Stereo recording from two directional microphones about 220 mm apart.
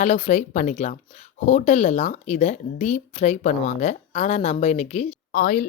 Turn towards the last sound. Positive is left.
turn(degrees=40)  # may be behind; listen again after turning